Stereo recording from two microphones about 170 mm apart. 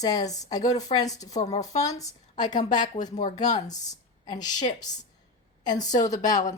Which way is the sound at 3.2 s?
45° left (ahead or behind).